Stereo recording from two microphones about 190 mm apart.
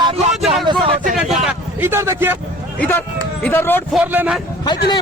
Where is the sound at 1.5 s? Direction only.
10° right (ahead or behind).